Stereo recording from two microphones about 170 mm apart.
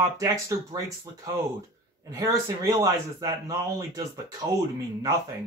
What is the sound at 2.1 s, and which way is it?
Speech, 20° right (ahead or behind).